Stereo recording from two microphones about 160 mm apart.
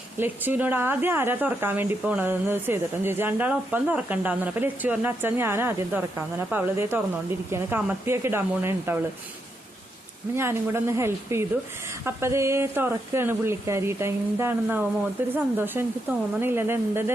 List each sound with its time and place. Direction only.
0.2 s speech: 10° right (ahead or behind)
10.3 s speech: 15° right (ahead or behind)